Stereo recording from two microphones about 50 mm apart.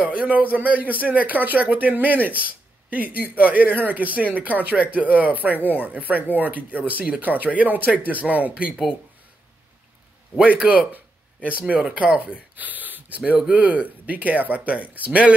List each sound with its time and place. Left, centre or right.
0.0 s a man's voice: right
10.4 s a man's voice: right